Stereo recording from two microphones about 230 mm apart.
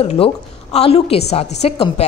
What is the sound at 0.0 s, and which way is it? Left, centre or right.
A woman's voice, left.